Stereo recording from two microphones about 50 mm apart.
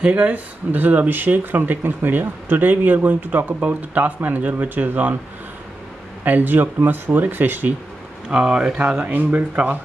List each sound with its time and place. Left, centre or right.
0.0 s speech: right
6.2 s speech: right
8.3 s speech: centre
8.7 s speech: right